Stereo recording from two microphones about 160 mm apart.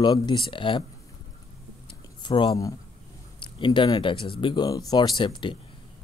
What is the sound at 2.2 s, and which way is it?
Speech, 30° left (ahead or behind).